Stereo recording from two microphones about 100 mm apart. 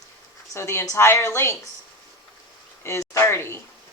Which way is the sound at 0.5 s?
25° left (ahead or behind).